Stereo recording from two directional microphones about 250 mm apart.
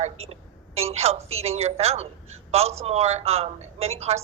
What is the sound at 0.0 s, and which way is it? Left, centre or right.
A man's voice, right.